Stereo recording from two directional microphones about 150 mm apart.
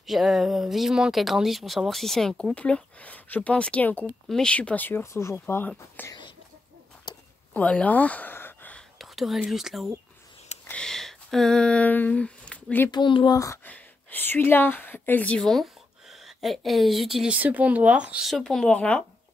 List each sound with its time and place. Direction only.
0.0 s speech: centre (ahead or behind)
7.1 s a sound: 30° left (ahead or behind)
7.5 s speech: 10° left (ahead or behind)
8.9 s speech: centre (ahead or behind)
12.9 s speech: 30° left (ahead or behind)
13.7 s speech: 10° left (ahead or behind); by 18.3 s 10° right (ahead or behind)
18.3 s speech: 5° left (ahead or behind)